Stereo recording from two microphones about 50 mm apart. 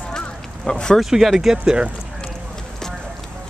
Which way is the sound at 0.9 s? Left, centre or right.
Centre.